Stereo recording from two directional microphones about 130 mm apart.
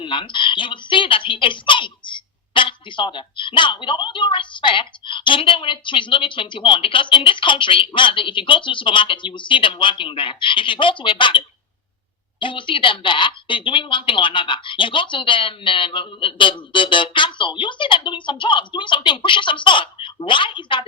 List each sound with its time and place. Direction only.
0.0 s speech: 40° left (ahead or behind)